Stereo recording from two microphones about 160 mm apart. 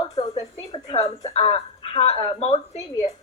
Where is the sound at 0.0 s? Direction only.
25° left (ahead or behind).